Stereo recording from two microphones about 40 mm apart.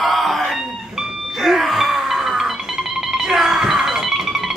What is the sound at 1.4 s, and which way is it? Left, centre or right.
Music, centre.